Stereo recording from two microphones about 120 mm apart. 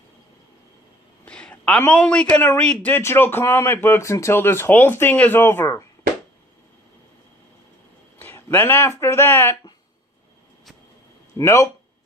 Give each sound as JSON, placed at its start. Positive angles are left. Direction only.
{"t": 1.2, "sound": "a sound", "side_deg": 10}
{"t": 1.9, "sound": "a man's voice", "side_deg": 10}
{"t": 8.2, "sound": "speech", "side_deg": 15}
{"t": 11.3, "sound": "a man's voice", "side_deg": 25}